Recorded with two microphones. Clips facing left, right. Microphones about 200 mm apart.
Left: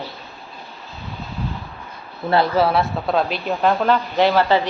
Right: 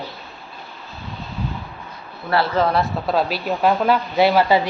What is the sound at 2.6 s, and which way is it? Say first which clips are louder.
A woman's voice: left 1 dB; 5° left (ahead or behind).